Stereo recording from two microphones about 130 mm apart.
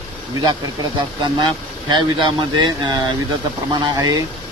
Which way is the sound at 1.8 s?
35° right (ahead or behind).